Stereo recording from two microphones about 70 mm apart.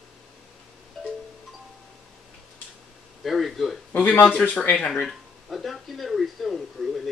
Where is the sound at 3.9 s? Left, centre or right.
Left.